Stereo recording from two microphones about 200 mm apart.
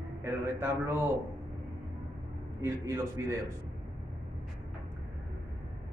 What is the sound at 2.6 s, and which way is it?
Speech, 15° right (ahead or behind).